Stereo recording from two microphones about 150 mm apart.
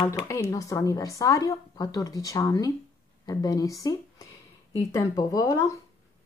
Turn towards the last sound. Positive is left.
turn(degrees=20)  # may be behind; listen again after turning